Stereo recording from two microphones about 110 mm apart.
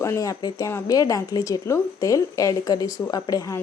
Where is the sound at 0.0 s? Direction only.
30° left (ahead or behind).